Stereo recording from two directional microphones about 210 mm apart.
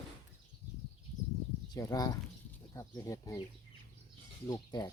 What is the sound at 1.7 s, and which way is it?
Speech, 15° left (ahead or behind).